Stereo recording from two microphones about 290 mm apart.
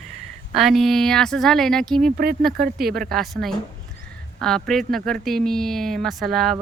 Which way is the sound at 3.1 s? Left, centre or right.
Centre.